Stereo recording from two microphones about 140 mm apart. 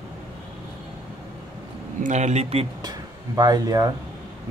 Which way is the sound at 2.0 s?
55° right (ahead or behind).